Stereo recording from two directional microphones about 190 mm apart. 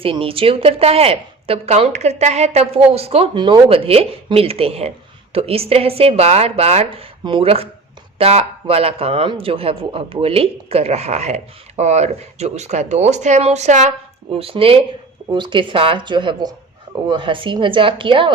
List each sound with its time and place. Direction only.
0.0 s a woman's voice: 30° right (ahead or behind)